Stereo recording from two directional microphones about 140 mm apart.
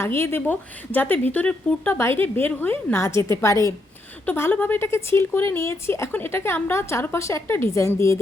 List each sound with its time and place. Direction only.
0.0 s speech: 15° left (ahead or behind)